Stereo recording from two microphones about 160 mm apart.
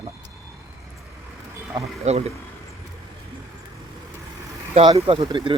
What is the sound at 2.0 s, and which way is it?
Speech, 40° right (ahead or behind).